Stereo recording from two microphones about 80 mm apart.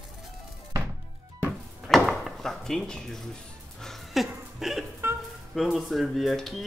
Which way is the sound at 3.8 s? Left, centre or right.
Centre.